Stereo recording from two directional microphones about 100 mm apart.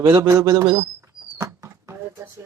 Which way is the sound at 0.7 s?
30° right (ahead or behind).